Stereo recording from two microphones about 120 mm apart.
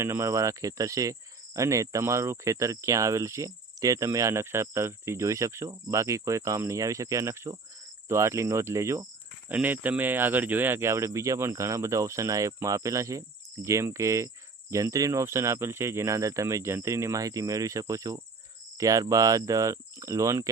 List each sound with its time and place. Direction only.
0.0 s speech: 20° right (ahead or behind)